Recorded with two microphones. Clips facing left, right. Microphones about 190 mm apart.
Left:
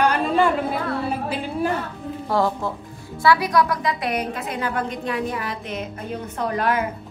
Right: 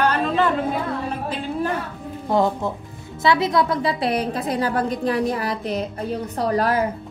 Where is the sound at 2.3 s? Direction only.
20° right (ahead or behind).